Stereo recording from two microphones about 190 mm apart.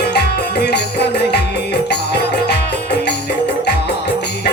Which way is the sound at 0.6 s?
60° left (ahead or behind).